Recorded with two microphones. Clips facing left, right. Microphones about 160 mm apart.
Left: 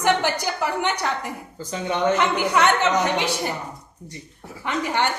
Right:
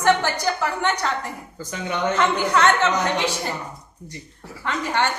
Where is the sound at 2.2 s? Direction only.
15° left (ahead or behind).